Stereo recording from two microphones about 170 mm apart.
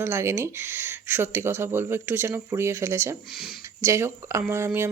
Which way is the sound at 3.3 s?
5° right (ahead or behind).